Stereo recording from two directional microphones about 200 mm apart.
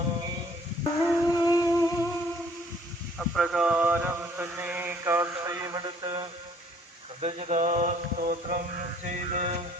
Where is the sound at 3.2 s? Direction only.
Centre (ahead or behind); by 6.2 s 20° right (ahead or behind).